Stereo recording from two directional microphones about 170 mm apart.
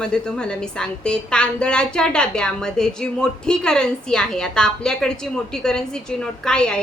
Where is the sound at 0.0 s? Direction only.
5° left (ahead or behind).